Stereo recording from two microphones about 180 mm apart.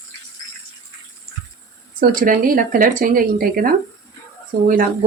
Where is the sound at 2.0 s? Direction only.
50° right (ahead or behind).